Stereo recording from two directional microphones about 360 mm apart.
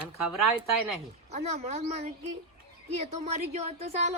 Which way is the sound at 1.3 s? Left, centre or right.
Centre.